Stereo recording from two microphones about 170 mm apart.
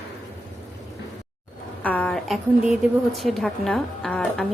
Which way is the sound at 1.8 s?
10° left (ahead or behind).